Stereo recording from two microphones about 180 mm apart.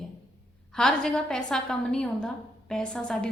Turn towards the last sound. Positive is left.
turn(degrees=5)  # may be behind; listen again after turning